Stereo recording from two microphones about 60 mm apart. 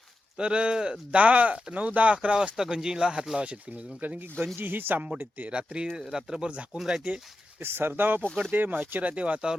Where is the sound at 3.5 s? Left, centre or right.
Right.